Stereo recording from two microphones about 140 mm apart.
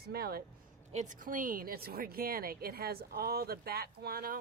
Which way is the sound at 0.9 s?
60° right (ahead or behind).